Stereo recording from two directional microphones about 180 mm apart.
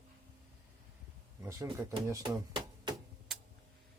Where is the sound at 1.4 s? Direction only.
15° right (ahead or behind).